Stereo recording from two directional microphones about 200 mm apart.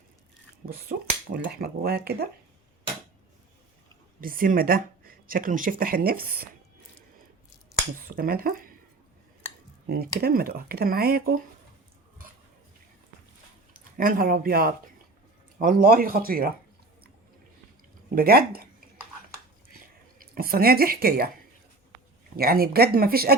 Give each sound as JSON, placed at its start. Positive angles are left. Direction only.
{"t": 0.6, "sound": "speech", "side_deg": -50}
{"t": 4.2, "sound": "speech", "side_deg": -45}
{"t": 8.0, "sound": "speech", "side_deg": -50}
{"t": 9.8, "sound": "speech", "side_deg": -50}
{"t": 13.7, "sound": "speech", "side_deg": -45}
{"t": 18.1, "sound": "speech", "side_deg": -50}
{"t": 20.1, "sound": "speech", "side_deg": -45}
{"t": 22.4, "sound": "speech", "side_deg": -50}